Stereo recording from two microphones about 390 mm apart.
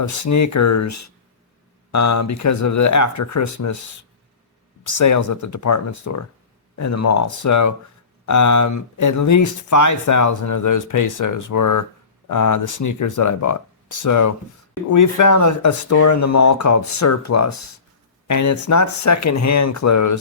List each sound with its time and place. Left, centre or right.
0.0 s speech: left
4.9 s speech: left